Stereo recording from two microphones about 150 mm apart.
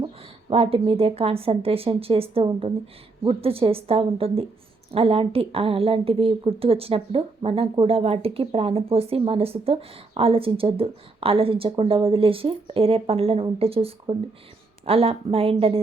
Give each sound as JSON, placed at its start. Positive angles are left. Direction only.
{"t": 0.5, "sound": "a woman's voice", "side_deg": -40}